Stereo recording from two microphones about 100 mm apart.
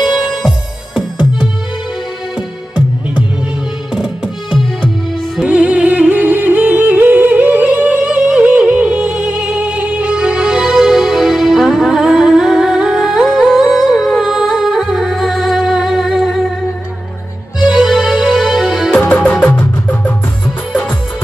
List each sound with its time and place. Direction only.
0.0 s music: 5° right (ahead or behind)
17.6 s music: 5° right (ahead or behind)
18.9 s music: 15° left (ahead or behind)